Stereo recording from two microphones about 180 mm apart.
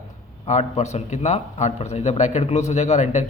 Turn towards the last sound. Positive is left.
turn(degrees=40)  # may be behind; listen again after turning